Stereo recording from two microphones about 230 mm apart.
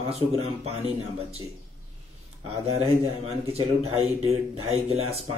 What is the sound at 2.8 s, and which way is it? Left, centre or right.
Speech, right.